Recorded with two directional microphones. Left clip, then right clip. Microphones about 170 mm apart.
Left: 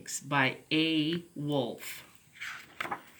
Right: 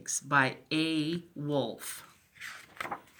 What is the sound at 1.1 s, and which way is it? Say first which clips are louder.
Speech: even; centre (ahead or behind).